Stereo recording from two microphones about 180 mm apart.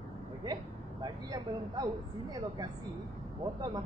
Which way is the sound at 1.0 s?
20° right (ahead or behind).